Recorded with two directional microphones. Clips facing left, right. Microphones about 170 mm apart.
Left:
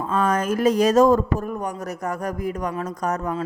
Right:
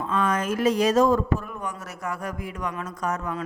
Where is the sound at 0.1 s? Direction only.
45° left (ahead or behind).